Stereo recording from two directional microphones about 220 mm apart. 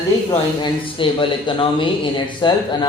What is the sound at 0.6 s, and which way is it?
Speech, 25° left (ahead or behind).